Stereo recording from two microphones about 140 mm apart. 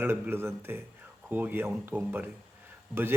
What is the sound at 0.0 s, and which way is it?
Speech, 15° right (ahead or behind).